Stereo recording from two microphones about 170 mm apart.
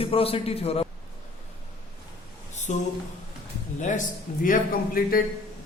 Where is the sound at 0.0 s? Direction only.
35° left (ahead or behind).